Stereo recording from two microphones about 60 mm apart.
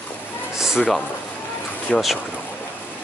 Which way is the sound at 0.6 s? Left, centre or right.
Centre.